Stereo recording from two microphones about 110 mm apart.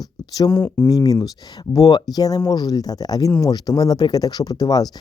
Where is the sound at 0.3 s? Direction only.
35° left (ahead or behind).